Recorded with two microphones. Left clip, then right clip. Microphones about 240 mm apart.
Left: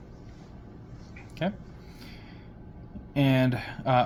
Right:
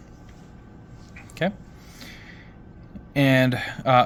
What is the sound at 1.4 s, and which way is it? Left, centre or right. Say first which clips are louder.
Speech: right 6 dB; right.